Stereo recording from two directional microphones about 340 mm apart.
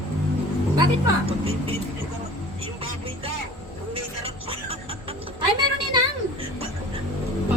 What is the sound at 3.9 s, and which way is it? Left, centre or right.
Music, centre.